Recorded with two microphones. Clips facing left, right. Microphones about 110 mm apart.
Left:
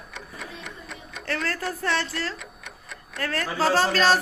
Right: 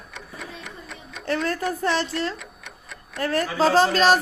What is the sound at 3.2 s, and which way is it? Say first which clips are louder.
Speech: right 4 dB; 20° right (ahead or behind).